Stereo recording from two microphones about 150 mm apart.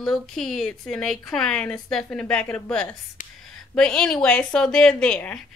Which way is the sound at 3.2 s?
55° left (ahead or behind).